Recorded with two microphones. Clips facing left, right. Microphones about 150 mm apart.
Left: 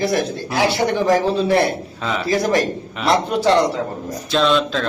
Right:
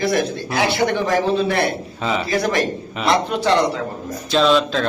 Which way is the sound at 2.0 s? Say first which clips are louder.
Right 2 dB; centre (ahead or behind).